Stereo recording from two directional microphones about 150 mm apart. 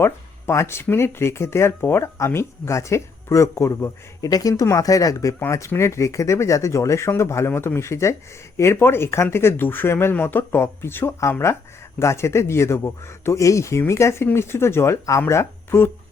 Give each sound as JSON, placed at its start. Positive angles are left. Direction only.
{"t": 0.0, "sound": "speech", "side_deg": 15}